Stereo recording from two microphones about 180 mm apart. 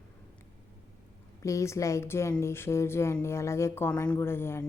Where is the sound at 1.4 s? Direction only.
15° left (ahead or behind).